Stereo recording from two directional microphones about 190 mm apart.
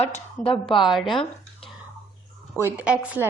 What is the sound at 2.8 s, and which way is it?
Speech, 10° right (ahead or behind).